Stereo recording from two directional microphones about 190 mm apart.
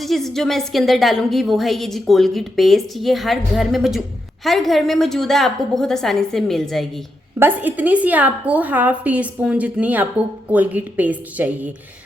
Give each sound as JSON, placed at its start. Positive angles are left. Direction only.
{"t": 0.0, "sound": "a woman's voice", "side_deg": 0}
{"t": 7.3, "sound": "a woman's voice", "side_deg": -10}